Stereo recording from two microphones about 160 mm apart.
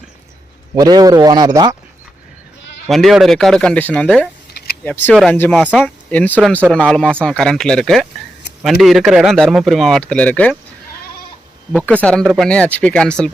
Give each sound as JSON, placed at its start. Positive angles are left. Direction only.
{"t": 0.8, "sound": "speech", "side_deg": -25}
{"t": 2.9, "sound": "speech", "side_deg": 0}
{"t": 5.1, "sound": "speech", "side_deg": 0}
{"t": 5.8, "sound": "speech", "side_deg": 10}
{"t": 11.9, "sound": "speech", "side_deg": 10}